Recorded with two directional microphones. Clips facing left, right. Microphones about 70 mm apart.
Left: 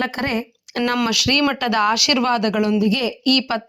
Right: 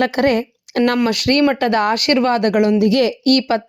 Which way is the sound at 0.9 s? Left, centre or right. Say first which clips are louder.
Right 4 dB; right.